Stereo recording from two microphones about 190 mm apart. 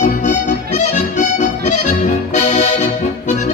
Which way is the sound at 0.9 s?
40° left (ahead or behind).